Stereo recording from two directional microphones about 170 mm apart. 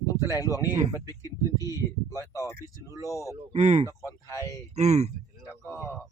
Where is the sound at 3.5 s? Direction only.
40° right (ahead or behind).